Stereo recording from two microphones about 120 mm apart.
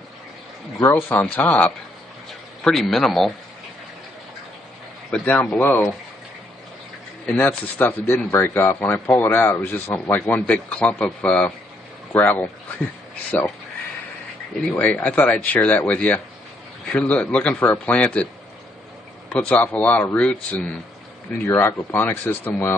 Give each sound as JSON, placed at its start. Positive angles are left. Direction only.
{"t": 0.7, "sound": "speech", "side_deg": 20}
{"t": 2.6, "sound": "a man's voice", "side_deg": 0}
{"t": 5.1, "sound": "speech", "side_deg": 10}
{"t": 7.2, "sound": "speech", "side_deg": 15}
{"t": 14.5, "sound": "speech", "side_deg": 5}